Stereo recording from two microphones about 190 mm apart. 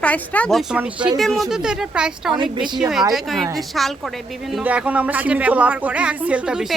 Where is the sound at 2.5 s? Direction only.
25° right (ahead or behind).